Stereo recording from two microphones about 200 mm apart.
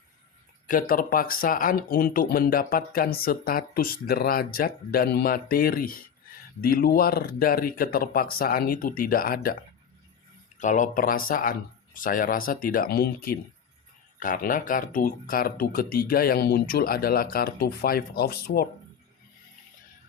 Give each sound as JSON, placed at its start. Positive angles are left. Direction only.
{"t": 0.7, "sound": "speech", "side_deg": 45}
{"t": 10.6, "sound": "speech", "side_deg": 40}